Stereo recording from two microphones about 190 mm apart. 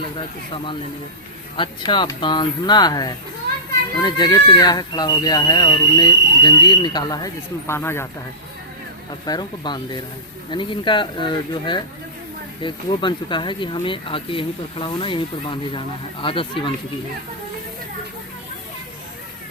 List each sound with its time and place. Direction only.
0.5 s speech: 25° left (ahead or behind)
9.2 s speech: 20° left (ahead or behind)